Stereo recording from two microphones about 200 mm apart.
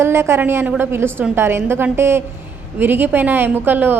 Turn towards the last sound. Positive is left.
turn(degrees=-10)  # may be behind; listen again after turning